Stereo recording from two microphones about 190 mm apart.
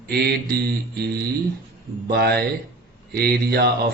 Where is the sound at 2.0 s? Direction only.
55° right (ahead or behind).